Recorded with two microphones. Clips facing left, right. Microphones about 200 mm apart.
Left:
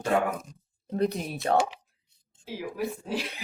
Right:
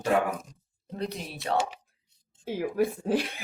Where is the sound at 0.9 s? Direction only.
50° left (ahead or behind).